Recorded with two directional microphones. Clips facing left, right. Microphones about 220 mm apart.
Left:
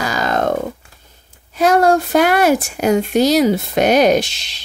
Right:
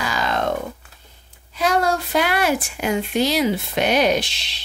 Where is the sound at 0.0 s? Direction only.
45° left (ahead or behind).